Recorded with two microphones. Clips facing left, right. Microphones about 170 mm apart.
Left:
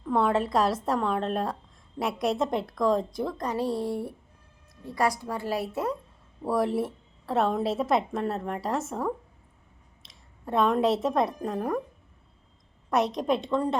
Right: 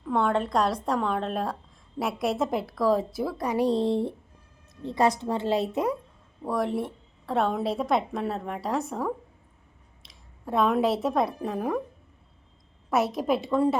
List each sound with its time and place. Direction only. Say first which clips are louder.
0.0 s a woman's voice: even; centre (ahead or behind); by 6.0 s 15° right (ahead or behind)
6.4 s a woman's voice: left 2 dB; centre (ahead or behind)
12.9 s a woman's voice: right 1 dB; 5° right (ahead or behind)